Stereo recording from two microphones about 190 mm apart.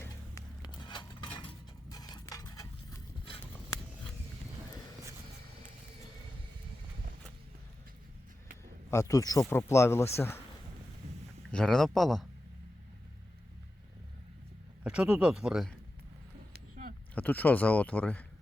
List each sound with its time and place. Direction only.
0.0 s dishes: 20° left (ahead or behind)
1.9 s a sound: 20° left (ahead or behind)
8.9 s speech: 15° left (ahead or behind)
11.5 s speech: centre (ahead or behind)
14.8 s speech: 5° right (ahead or behind)
17.2 s speech: 10° left (ahead or behind)